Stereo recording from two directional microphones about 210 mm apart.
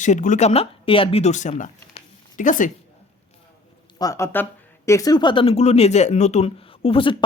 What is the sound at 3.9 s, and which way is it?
Speech, 15° left (ahead or behind).